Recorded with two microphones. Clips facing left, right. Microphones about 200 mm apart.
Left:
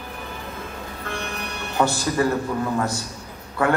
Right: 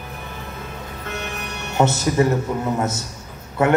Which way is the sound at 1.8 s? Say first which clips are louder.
Right 3 dB; 25° right (ahead or behind).